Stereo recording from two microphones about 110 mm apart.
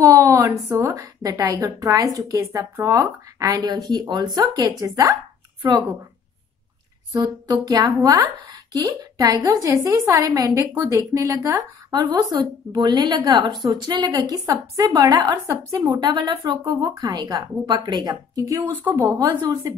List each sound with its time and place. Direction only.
0.0 s a woman's voice: 30° right (ahead or behind)
7.5 s a woman's voice: 35° right (ahead or behind)
14.4 s a woman's voice: 30° right (ahead or behind)
18.6 s speech: 15° right (ahead or behind)
19.1 s a woman's voice: 40° right (ahead or behind)